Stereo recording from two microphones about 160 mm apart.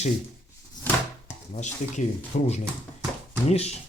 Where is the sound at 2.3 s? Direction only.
45° left (ahead or behind).